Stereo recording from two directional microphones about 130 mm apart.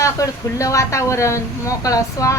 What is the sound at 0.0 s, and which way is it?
A woman's voice, 25° left (ahead or behind).